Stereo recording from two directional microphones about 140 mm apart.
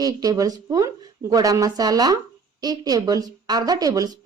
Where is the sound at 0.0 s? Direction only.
25° right (ahead or behind).